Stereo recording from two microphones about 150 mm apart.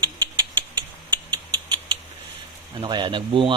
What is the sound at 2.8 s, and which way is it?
Speech, 30° right (ahead or behind).